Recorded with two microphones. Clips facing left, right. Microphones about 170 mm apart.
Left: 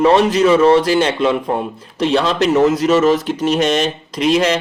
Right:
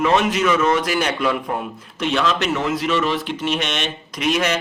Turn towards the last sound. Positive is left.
turn(degrees=30)  # may be behind; listen again after turning